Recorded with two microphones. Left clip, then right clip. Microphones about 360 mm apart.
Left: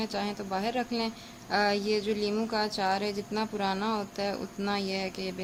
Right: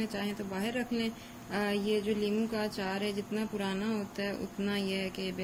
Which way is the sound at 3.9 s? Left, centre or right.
Left.